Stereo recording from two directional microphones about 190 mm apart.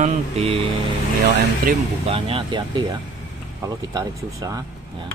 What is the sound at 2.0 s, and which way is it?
Speech, 30° right (ahead or behind).